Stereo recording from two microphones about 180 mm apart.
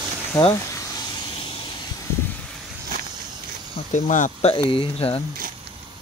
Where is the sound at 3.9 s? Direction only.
45° left (ahead or behind).